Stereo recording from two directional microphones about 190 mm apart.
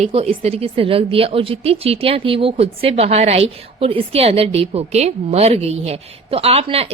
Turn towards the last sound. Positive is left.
turn(degrees=-30)  # may be behind; listen again after turning